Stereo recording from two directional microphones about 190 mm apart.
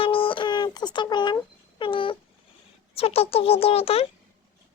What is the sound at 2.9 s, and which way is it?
A child's voice, 30° left (ahead or behind).